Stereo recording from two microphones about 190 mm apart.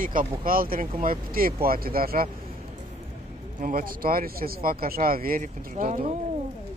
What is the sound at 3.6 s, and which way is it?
Speech, 50° right (ahead or behind).